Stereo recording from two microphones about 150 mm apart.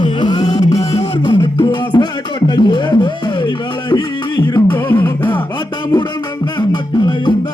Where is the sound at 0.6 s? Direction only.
45° left (ahead or behind).